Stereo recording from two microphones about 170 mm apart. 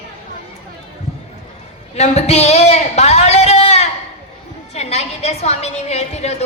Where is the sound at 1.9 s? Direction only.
40° left (ahead or behind).